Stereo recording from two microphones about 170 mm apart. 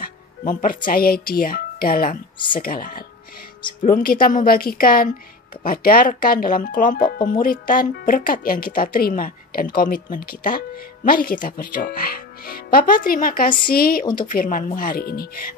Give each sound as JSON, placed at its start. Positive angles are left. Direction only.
{"t": 0.5, "sound": "speech", "side_deg": 55}